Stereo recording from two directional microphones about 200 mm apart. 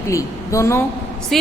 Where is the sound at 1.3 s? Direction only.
Centre (ahead or behind).